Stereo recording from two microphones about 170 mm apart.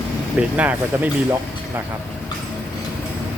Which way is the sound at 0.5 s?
10° right (ahead or behind).